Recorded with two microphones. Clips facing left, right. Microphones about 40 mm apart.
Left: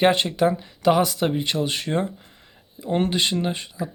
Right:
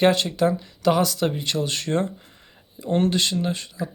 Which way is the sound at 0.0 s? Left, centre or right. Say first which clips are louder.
Even; left.